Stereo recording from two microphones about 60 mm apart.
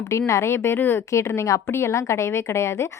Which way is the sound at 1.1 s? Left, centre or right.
Left.